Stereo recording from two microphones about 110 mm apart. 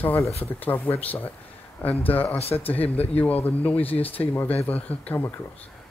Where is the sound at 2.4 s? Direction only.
65° left (ahead or behind).